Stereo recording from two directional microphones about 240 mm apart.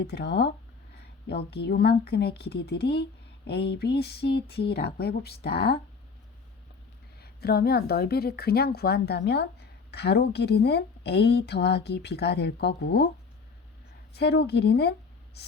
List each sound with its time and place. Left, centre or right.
0.0 s a woman's voice: left
7.2 s a woman's voice: left
14.1 s a woman's voice: left
15.4 s static: left